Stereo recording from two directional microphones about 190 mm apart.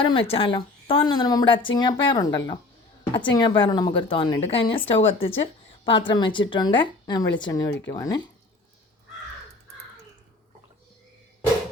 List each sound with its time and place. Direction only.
0.0 s a woman's voice: 30° left (ahead or behind)